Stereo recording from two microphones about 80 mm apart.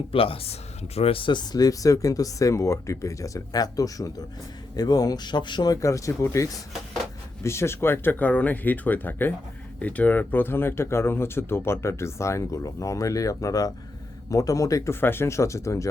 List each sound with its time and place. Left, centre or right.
1.2 s speech: left
1.5 s speech: left
5.8 s speech: left
15.0 s speech: left